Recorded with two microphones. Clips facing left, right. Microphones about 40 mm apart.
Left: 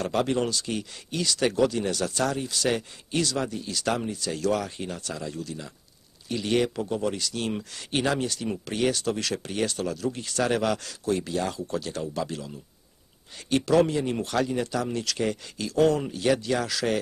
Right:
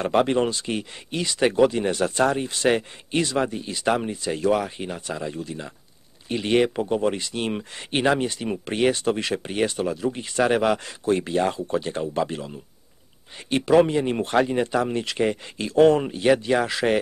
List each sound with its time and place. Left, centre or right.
0.0 s speech: right